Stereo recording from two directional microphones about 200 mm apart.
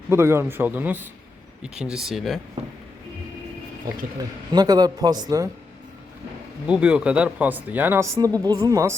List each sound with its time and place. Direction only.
0.1 s speech: 15° right (ahead or behind)
4.2 s a man's voice: 20° right (ahead or behind)
6.7 s speech: 5° right (ahead or behind)